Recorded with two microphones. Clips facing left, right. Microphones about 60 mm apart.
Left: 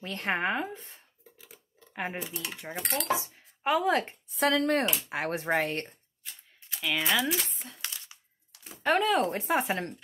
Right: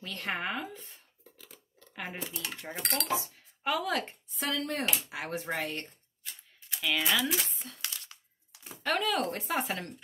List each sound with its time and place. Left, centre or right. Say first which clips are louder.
0.0 s speech: left 5 dB; left
1.3 s a sound: left 1 dB; centre
2.1 s speech: left 2 dB; centre
3.6 s speech: left 5 dB; left
4.4 s speech: left 8 dB; left
5.1 s speech: left 6 dB; left
6.7 s speech: left 1 dB; centre
7.6 s a sound: even; centre
8.8 s speech: left 5 dB; left